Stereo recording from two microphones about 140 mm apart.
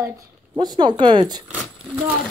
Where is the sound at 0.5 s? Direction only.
35° right (ahead or behind).